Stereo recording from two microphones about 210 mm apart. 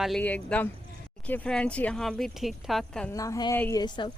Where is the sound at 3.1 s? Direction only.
15° left (ahead or behind).